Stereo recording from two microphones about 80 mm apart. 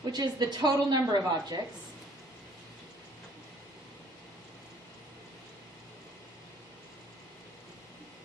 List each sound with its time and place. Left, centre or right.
0.0 s a woman's voice: right